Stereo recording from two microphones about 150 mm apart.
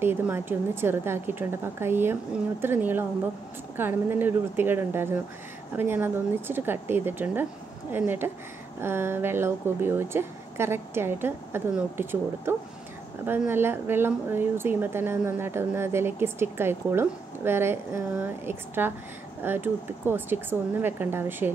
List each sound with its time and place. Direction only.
0.0 s speech: 15° right (ahead or behind)